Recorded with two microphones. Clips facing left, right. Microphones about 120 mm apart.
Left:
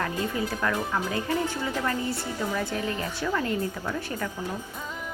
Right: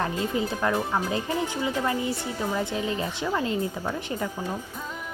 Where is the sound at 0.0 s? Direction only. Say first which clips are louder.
Right 2 dB; 25° right (ahead or behind).